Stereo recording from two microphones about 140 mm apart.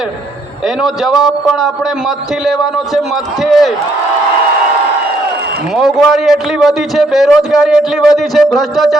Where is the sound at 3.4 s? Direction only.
Centre (ahead or behind).